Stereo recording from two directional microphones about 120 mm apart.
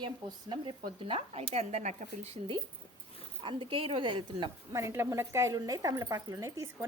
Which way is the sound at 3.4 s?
45° right (ahead or behind).